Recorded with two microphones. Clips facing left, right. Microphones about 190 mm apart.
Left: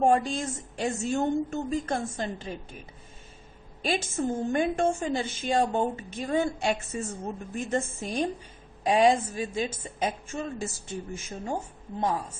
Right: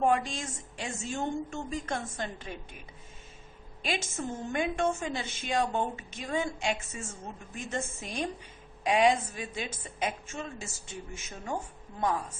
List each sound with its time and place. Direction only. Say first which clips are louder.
0.0 s a woman's voice: left 4 dB; 35° left (ahead or behind)
3.8 s a woman's voice: left 6 dB; 35° left (ahead or behind)